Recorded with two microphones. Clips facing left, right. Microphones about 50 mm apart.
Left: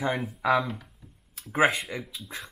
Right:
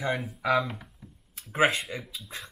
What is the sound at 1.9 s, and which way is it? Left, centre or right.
Speech, centre.